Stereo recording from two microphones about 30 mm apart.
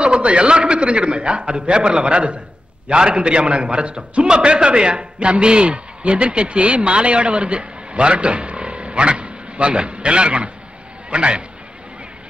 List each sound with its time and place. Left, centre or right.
0.0 s a man's voice: right